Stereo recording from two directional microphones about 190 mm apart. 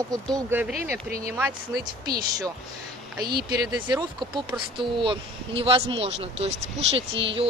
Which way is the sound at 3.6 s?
20° right (ahead or behind).